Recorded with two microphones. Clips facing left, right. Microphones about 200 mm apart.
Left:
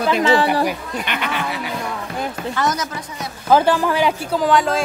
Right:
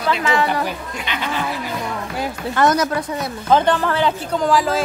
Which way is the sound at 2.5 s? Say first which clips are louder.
Right 8 dB; 55° right (ahead or behind).